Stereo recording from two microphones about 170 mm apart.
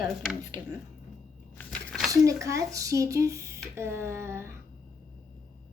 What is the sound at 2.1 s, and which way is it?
Speech, 20° right (ahead or behind).